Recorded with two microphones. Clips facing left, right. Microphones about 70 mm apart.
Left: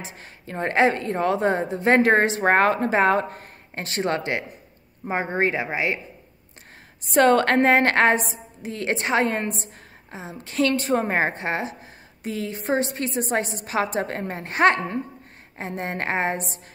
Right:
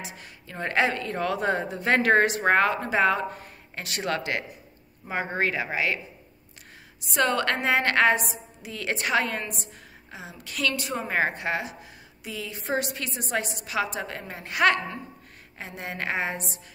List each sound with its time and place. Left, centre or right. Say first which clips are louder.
0.0 s a woman's voice: left 2 dB; left
7.1 s a woman's voice: left 7 dB; left